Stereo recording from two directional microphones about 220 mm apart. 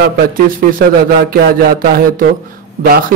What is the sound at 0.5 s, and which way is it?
Speech, 40° right (ahead or behind).